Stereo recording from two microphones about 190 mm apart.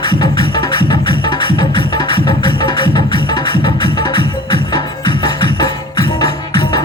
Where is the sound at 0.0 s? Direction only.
20° left (ahead or behind).